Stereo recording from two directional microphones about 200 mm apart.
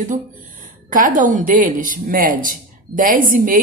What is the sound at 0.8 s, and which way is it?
Speech, 40° right (ahead or behind).